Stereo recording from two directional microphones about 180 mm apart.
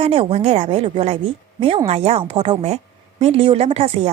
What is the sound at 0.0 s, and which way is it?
A woman's voice, 30° right (ahead or behind).